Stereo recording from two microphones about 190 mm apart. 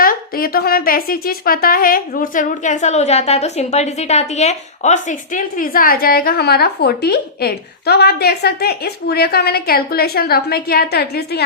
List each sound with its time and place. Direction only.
0.0 s speech: 50° left (ahead or behind)